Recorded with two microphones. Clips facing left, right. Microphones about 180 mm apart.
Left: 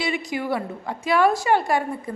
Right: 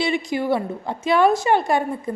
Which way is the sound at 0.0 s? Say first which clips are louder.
Right 4 dB; 25° right (ahead or behind).